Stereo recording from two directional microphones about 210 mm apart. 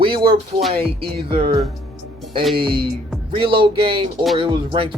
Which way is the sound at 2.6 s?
25° right (ahead or behind).